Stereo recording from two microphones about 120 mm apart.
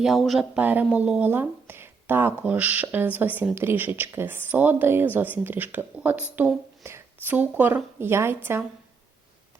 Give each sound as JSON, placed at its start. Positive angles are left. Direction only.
{"t": 0.0, "sound": "speech", "side_deg": 0}
{"t": 0.5, "sound": "a woman's voice", "side_deg": -15}